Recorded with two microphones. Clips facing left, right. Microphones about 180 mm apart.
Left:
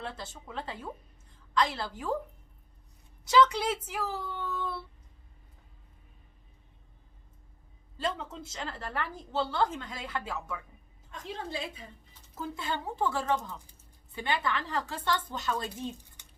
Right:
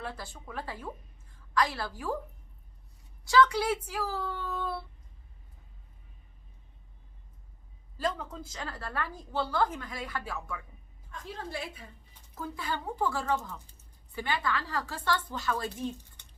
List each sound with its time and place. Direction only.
0.5 s speech: 20° left (ahead or behind)
3.2 s speech: 20° left (ahead or behind)
7.9 s speech: 25° left (ahead or behind)